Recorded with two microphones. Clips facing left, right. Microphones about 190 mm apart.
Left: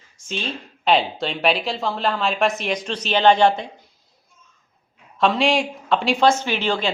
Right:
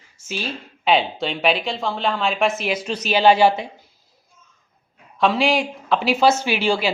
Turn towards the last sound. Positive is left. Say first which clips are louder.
# right 2 dB
turn(degrees=-10)  # may be behind; listen again after turning